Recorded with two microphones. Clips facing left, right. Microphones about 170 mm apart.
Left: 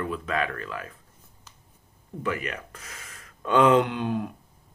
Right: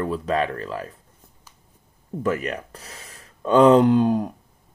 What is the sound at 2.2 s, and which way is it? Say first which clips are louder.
Speech: right 6 dB; 40° right (ahead or behind).